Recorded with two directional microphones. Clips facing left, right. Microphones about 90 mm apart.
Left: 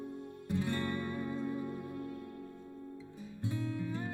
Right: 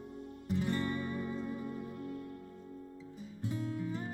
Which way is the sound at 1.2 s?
30° left (ahead or behind).